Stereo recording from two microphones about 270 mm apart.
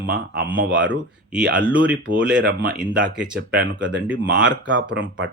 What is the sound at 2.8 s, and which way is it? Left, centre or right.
Speech, centre.